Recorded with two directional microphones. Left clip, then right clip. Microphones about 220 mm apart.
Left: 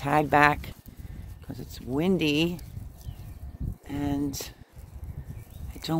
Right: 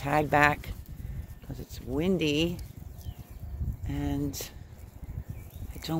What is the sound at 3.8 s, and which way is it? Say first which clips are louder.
Speech: left 3 dB; 20° left (ahead or behind).